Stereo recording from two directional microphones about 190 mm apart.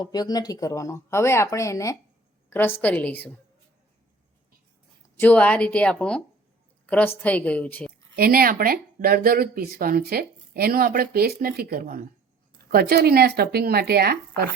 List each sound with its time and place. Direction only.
0.0 s speech: 20° left (ahead or behind)
5.2 s speech: 10° left (ahead or behind)
8.1 s speech: 50° right (ahead or behind)